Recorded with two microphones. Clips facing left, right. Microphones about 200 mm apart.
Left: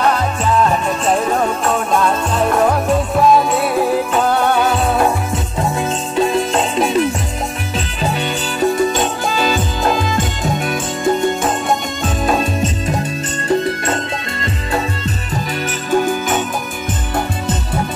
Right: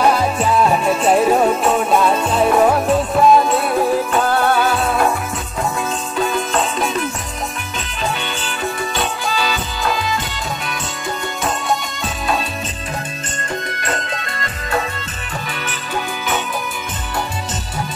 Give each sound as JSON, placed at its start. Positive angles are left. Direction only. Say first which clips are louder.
{"t": 0.0, "sound": "music", "louder": "right 1 dB", "side_deg": -10}
{"t": 5.8, "sound": "music", "louder": "left 6 dB", "side_deg": 30}
{"t": 12.3, "sound": "music", "louder": "left 5 dB", "side_deg": 45}
{"t": 13.5, "sound": "music", "louder": "left 8 dB", "side_deg": 30}
{"t": 15.9, "sound": "music", "louder": "left 8 dB", "side_deg": 45}